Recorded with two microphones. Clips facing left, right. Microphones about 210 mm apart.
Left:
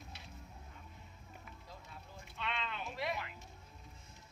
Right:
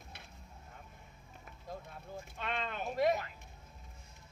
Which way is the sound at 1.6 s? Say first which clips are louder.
Right 7 dB; 50° right (ahead or behind).